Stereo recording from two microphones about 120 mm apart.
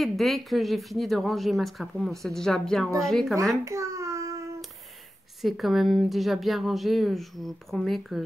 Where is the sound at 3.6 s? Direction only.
25° right (ahead or behind).